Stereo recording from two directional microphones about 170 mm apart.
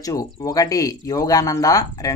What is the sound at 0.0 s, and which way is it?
Speech, 20° left (ahead or behind).